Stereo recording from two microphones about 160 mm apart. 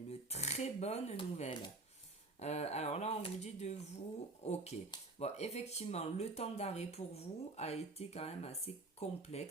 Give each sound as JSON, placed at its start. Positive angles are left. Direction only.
{"t": 0.1, "sound": "speech", "side_deg": 40}